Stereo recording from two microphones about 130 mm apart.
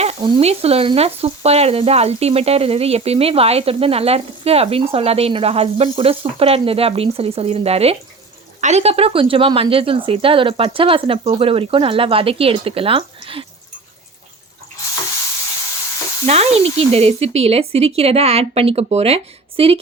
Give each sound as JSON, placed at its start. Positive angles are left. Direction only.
{"t": 0.2, "sound": "sizzle", "side_deg": -35}
{"t": 0.4, "sound": "speech", "side_deg": -50}
{"t": 16.2, "sound": "speech", "side_deg": -55}